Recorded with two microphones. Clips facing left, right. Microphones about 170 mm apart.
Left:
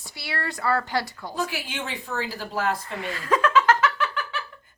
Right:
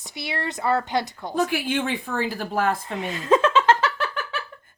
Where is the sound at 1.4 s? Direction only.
55° right (ahead or behind).